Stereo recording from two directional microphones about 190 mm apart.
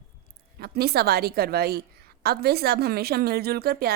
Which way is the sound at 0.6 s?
55° right (ahead or behind).